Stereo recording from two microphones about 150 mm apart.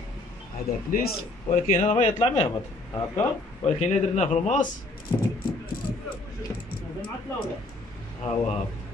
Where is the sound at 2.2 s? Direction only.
40° left (ahead or behind).